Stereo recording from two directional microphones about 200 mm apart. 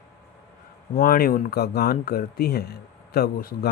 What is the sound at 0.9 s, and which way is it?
Speech, 45° left (ahead or behind).